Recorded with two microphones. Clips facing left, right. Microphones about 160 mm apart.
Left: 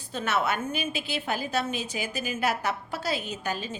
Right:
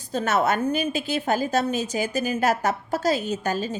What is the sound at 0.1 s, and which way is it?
A woman's voice, 40° right (ahead or behind).